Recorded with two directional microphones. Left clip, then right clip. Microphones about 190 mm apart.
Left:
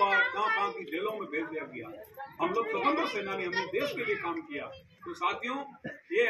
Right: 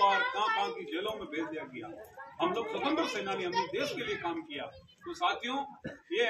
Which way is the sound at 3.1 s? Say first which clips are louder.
Left 1 dB; 15° right (ahead or behind).